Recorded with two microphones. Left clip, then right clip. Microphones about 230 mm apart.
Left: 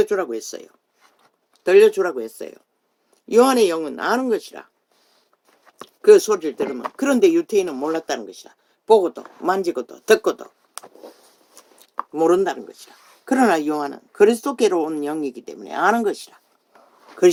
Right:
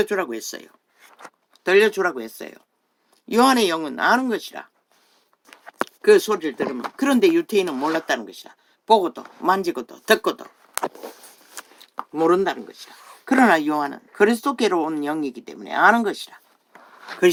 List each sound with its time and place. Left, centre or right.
0.0 s speech: right
5.8 s speech: right
11.6 s a sound: right
12.1 s speech: right